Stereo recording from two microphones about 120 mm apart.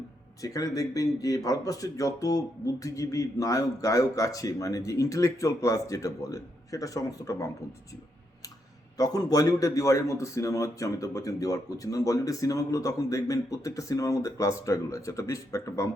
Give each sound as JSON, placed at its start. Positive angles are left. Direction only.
{"t": 0.4, "sound": "speech", "side_deg": 30}
{"t": 9.0, "sound": "speech", "side_deg": 30}